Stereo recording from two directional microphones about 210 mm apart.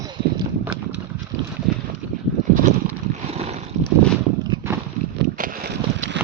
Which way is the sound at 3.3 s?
30° right (ahead or behind).